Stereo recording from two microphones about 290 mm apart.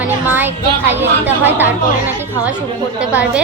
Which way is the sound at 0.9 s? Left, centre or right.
Centre.